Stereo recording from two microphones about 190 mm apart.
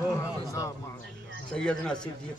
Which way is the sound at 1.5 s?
5° left (ahead or behind).